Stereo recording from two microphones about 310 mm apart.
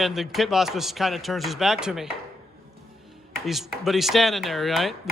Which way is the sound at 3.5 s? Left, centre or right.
Centre.